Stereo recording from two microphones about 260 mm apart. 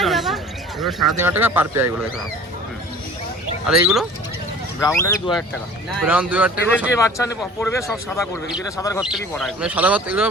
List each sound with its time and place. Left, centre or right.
0.0 s a sound: centre
0.8 s speech: centre
3.7 s speech: centre
4.8 s a man's voice: centre
6.0 s speech: centre
6.7 s a man's voice: centre
9.0 s speech: centre